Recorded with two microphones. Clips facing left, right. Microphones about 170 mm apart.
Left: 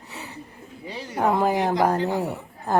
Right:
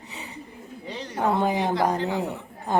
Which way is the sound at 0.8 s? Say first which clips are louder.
Left 2 dB; 10° left (ahead or behind).